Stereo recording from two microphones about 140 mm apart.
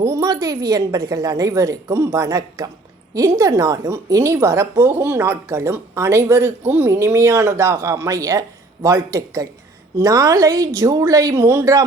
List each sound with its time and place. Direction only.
0.0 s a woman's voice: 25° right (ahead or behind)